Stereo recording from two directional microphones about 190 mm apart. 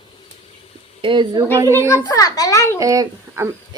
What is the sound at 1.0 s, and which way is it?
Speech, 25° right (ahead or behind).